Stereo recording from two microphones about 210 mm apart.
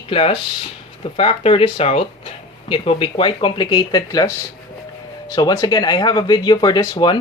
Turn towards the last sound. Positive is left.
turn(degrees=20)  # may be behind; listen again after turning